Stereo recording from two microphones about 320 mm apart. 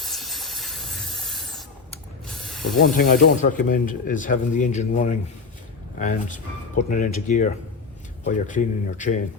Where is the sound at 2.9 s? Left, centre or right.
Left.